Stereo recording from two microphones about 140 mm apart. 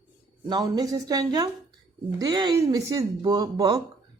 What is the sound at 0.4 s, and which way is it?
Speech, 30° right (ahead or behind).